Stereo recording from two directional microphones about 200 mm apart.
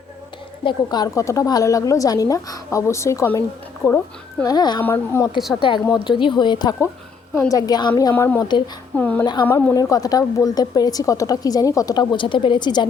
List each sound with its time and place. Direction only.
0.6 s a woman's voice: 20° left (ahead or behind)
5.5 s a woman's voice: 25° left (ahead or behind)
9.0 s a woman's voice: 10° left (ahead or behind)
9.2 s a woman's voice: 20° left (ahead or behind)